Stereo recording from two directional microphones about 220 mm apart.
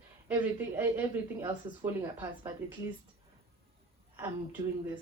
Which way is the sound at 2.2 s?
10° right (ahead or behind).